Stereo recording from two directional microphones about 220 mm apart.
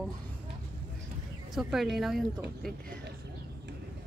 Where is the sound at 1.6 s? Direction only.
Centre (ahead or behind).